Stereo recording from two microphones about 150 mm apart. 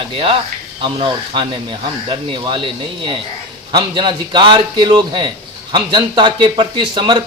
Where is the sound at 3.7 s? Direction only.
30° right (ahead or behind).